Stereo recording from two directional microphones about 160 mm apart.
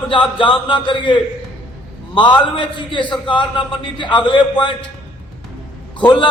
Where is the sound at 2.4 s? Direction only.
30° left (ahead or behind).